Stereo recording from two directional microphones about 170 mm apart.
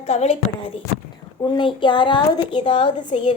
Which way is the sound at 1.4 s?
25° left (ahead or behind).